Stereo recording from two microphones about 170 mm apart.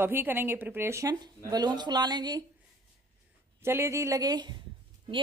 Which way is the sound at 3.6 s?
15° right (ahead or behind).